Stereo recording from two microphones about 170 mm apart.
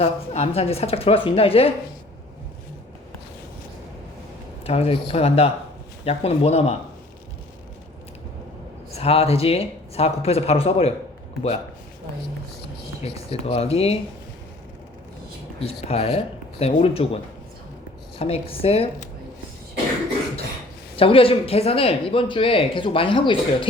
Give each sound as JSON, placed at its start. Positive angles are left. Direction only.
{"t": 0.0, "sound": "speech", "side_deg": 35}
{"t": 4.6, "sound": "speech", "side_deg": 35}
{"t": 9.0, "sound": "speech", "side_deg": 35}
{"t": 13.0, "sound": "speech", "side_deg": 35}
{"t": 15.6, "sound": "speech", "side_deg": 35}
{"t": 18.2, "sound": "speech", "side_deg": 35}
{"t": 20.9, "sound": "speech", "side_deg": 35}